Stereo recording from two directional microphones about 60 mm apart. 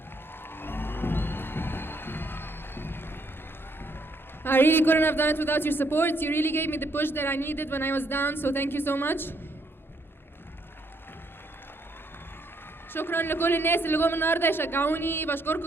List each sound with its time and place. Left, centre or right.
0.4 s music: left
4.4 s a man's voice: left
12.9 s a man's voice: left